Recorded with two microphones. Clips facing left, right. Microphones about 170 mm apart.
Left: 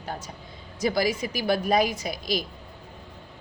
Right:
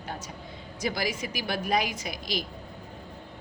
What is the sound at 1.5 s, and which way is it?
Speech, 40° left (ahead or behind).